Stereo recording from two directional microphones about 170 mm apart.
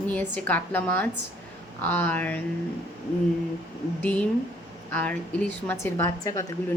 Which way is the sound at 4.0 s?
10° left (ahead or behind).